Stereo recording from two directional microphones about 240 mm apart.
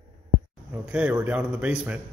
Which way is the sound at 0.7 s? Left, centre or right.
Centre.